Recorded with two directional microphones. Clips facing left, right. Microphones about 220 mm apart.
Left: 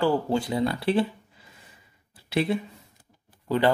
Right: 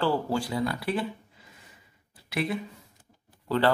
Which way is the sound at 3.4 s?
15° left (ahead or behind).